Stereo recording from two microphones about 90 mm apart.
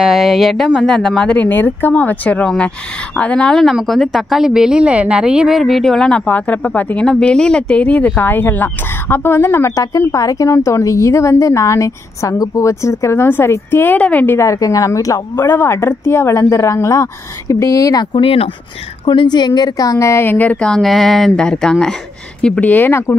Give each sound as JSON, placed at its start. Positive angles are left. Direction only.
{"t": 0.0, "sound": "a woman's voice", "side_deg": -5}
{"t": 15.3, "sound": "a woman's voice", "side_deg": 25}
{"t": 18.2, "sound": "speech", "side_deg": 90}
{"t": 19.0, "sound": "a woman's voice", "side_deg": 55}
{"t": 22.4, "sound": "speech", "side_deg": 20}